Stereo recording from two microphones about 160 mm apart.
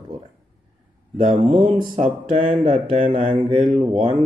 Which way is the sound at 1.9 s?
45° right (ahead or behind).